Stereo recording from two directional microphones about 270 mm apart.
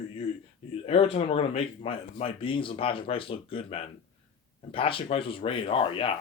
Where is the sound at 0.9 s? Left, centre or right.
Left.